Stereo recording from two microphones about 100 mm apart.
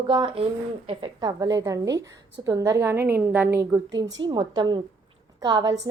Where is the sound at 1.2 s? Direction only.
40° right (ahead or behind); by 3.6 s 20° right (ahead or behind).